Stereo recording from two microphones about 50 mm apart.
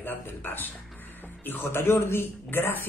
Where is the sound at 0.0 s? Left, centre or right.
Left.